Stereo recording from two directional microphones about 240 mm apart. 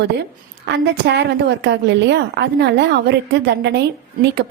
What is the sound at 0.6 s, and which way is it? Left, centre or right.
A woman's voice, right.